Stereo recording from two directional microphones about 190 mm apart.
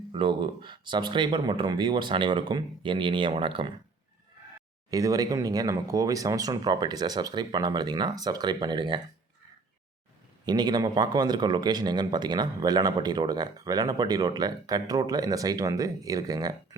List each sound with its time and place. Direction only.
0.1 s a man's voice: 25° right (ahead or behind)
4.9 s a man's voice: 20° right (ahead or behind)
10.4 s a man's voice: 20° right (ahead or behind)